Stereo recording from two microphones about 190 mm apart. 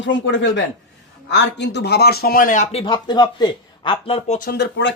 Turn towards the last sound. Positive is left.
turn(degrees=70)  # may be behind; listen again after turning